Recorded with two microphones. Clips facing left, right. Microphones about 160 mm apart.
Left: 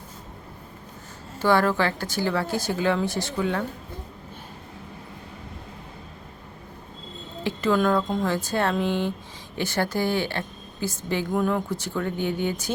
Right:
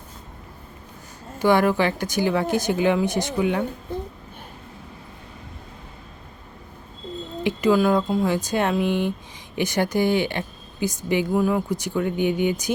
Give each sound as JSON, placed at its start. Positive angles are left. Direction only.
{"t": 1.4, "sound": "speech", "side_deg": -15}
{"t": 7.4, "sound": "speech", "side_deg": -10}